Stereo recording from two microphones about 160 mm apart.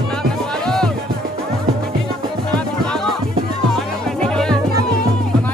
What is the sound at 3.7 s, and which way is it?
Music, 5° left (ahead or behind).